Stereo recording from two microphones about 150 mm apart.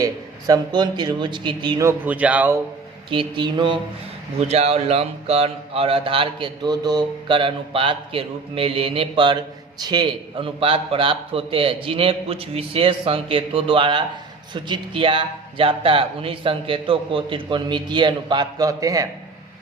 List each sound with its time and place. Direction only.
0.0 s speech: 25° right (ahead or behind)
1.8 s speech: 15° right (ahead or behind)
3.1 s speech: 35° right (ahead or behind)
4.4 s speech: 45° right (ahead or behind); by 19.0 s 20° right (ahead or behind)